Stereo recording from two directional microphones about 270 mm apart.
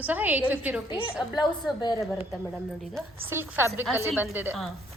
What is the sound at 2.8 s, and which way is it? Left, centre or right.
A woman's voice, centre.